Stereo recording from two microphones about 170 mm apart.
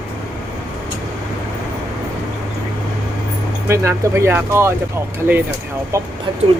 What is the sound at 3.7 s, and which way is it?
Speech, 15° right (ahead or behind).